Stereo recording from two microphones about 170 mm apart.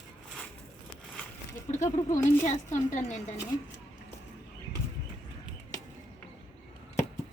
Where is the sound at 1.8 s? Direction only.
20° left (ahead or behind).